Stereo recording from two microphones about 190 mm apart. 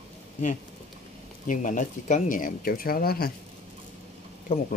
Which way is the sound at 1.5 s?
45° left (ahead or behind).